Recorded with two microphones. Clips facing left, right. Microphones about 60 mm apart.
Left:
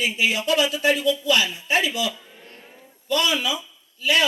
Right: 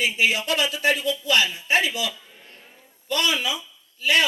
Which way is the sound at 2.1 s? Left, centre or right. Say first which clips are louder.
Left 3 dB; centre.